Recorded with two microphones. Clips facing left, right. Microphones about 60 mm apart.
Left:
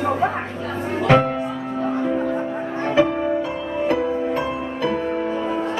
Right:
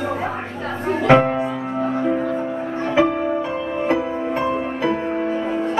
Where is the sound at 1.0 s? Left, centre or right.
Centre.